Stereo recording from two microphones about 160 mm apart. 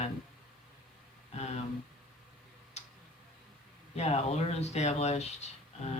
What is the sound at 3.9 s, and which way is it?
Speech, 40° left (ahead or behind).